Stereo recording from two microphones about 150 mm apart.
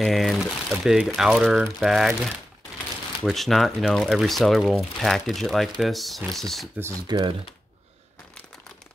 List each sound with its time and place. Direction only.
0.0 s speech: centre (ahead or behind)
7.1 s speech: 30° right (ahead or behind)